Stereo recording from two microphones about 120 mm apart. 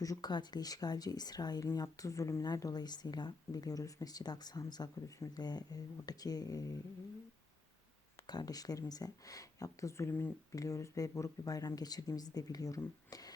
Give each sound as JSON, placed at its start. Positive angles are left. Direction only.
{"t": 0.0, "sound": "speech", "side_deg": 30}
{"t": 8.3, "sound": "speech", "side_deg": 35}
{"t": 10.5, "sound": "speech", "side_deg": 30}